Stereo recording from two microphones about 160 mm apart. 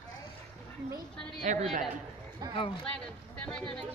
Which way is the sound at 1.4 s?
50° right (ahead or behind).